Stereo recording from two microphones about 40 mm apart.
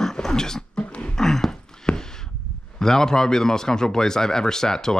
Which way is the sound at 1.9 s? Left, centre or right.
Left.